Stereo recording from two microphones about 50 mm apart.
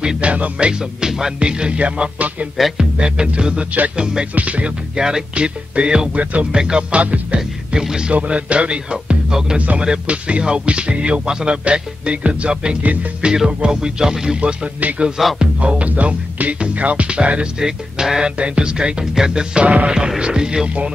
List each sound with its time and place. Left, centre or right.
0.0 s music: centre
2.8 s speech: centre
4.4 s music: right
6.6 s speech: centre
7.0 s music: right
7.3 s speech: centre
8.1 s music: right
13.5 s speech: centre
14.8 s music: right
19.9 s speech: centre